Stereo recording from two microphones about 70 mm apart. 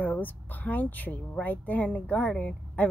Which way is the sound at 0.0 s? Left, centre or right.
Left.